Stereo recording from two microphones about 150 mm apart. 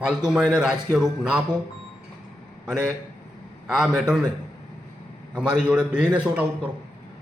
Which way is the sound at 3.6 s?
5° right (ahead or behind).